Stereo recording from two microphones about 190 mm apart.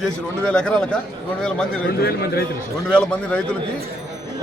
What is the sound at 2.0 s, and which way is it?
Speech, 55° left (ahead or behind).